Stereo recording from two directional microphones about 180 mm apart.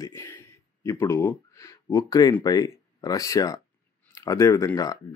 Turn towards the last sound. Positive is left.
turn(degrees=20)  # may be behind; listen again after turning